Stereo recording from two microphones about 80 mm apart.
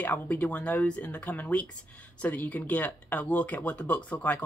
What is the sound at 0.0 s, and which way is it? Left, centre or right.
Speech, left.